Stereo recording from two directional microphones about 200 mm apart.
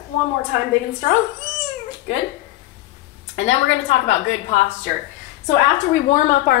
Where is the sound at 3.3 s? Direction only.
70° left (ahead or behind).